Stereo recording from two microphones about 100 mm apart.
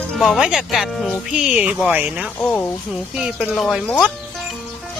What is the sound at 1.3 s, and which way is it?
Speech, 10° right (ahead or behind).